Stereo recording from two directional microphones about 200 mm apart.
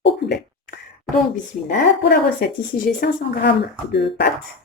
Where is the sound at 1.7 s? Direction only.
50° left (ahead or behind).